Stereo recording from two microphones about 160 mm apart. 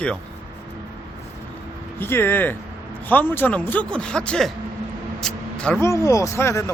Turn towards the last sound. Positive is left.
turn(degrees=15)  # may be behind; listen again after turning